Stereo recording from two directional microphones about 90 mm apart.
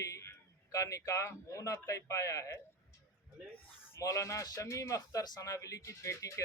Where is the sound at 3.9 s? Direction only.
35° left (ahead or behind).